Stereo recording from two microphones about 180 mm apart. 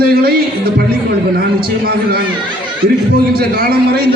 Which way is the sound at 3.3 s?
60° right (ahead or behind).